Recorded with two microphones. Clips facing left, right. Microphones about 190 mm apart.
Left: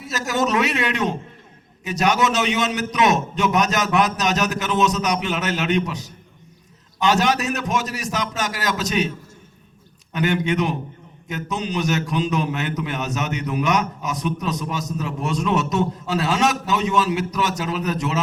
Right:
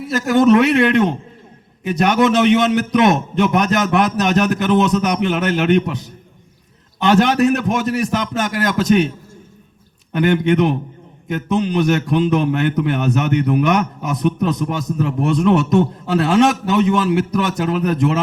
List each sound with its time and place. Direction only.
0.0 s a man's voice: 55° right (ahead or behind)
10.1 s a man's voice: 60° right (ahead or behind)